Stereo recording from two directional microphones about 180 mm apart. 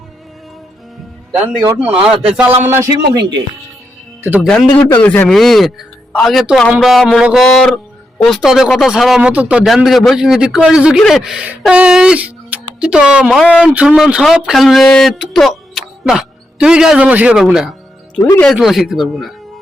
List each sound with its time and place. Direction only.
1.6 s a man's voice: 10° right (ahead or behind)
4.6 s a man's voice: 20° left (ahead or behind)
4.9 s a man's voice: 10° left (ahead or behind)
18.2 s a man's voice: 15° left (ahead or behind)
18.5 s speech: centre (ahead or behind)